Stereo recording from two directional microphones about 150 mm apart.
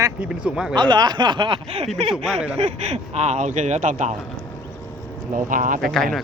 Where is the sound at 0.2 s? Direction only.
5° right (ahead or behind).